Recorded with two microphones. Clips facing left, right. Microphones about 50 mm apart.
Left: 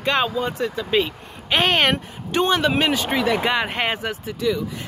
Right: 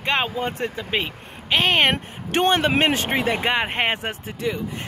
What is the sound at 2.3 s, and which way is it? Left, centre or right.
Speech, right.